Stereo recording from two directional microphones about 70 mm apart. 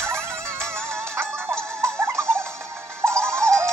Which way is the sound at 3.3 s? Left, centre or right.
Right.